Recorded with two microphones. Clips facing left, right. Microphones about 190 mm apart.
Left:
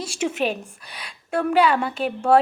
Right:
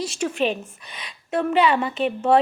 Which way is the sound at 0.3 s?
10° left (ahead or behind).